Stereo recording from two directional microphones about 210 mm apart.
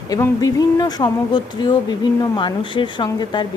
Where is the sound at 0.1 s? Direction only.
15° left (ahead or behind).